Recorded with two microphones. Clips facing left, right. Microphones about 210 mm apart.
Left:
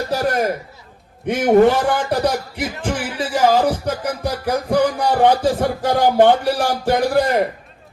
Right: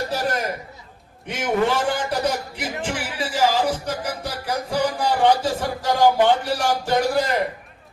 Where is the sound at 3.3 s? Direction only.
55° left (ahead or behind).